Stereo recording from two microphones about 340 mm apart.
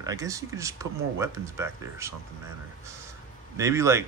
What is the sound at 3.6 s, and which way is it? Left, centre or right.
Speech, centre.